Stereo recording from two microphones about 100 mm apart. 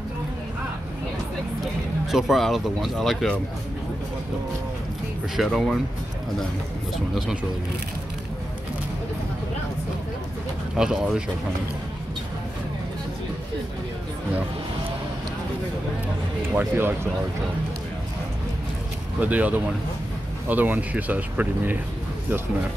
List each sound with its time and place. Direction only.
1.6 s speech: 5° right (ahead or behind)
5.3 s speech: centre (ahead or behind)
10.8 s speech: 5° right (ahead or behind)
16.4 s speech: 20° right (ahead or behind)
19.1 s speech: 15° right (ahead or behind)